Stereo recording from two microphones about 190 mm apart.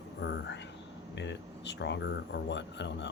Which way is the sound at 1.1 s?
70° left (ahead or behind).